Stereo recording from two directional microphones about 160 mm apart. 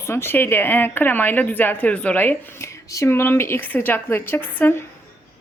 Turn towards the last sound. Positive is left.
turn(degrees=15)  # may be behind; listen again after turning